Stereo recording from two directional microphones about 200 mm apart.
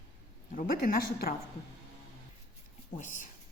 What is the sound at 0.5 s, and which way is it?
Speech, 45° left (ahead or behind).